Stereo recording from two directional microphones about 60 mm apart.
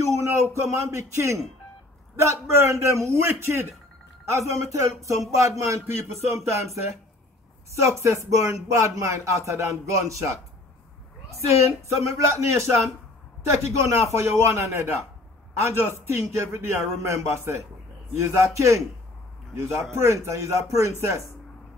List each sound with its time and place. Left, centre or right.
0.3 s speech: right
4.3 s a man's voice: right
7.8 s a man's voice: right
11.4 s a man's voice: right
15.8 s a man's voice: right